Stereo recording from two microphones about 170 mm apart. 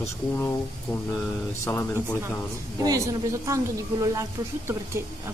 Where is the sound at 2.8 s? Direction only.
20° right (ahead or behind).